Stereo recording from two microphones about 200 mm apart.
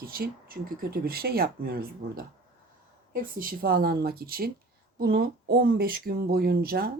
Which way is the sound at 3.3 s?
45° right (ahead or behind).